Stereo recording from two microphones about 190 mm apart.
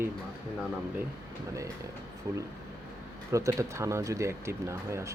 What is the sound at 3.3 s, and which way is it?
Speech, 15° right (ahead or behind).